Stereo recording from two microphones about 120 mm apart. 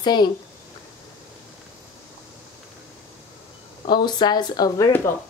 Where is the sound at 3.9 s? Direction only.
40° left (ahead or behind).